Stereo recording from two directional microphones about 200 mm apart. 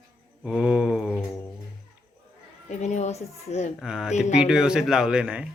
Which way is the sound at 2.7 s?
35° left (ahead or behind).